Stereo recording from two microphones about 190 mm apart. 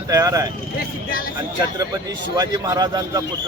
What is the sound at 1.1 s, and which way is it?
Speech, 50° left (ahead or behind).